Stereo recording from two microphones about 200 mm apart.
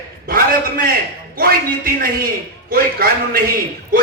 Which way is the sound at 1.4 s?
50° right (ahead or behind).